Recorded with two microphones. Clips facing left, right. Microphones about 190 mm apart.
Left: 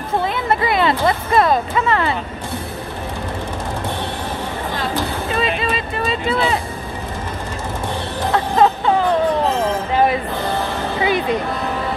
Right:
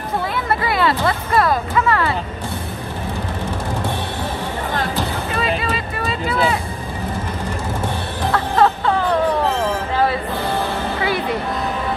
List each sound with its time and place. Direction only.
0.5 s speech: 20° left (ahead or behind)
5.6 s vehicle: 25° left (ahead or behind)
8.3 s music: 15° left (ahead or behind)
11.0 s music: 20° left (ahead or behind)